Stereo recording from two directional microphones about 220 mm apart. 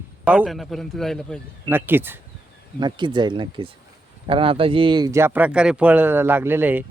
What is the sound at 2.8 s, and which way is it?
Speech, 20° right (ahead or behind).